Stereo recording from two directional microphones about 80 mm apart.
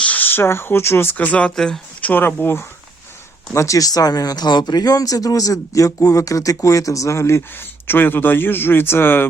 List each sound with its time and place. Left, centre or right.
0.0 s speech: left
1.1 s speech: centre
2.0 s speech: left
3.5 s speech: left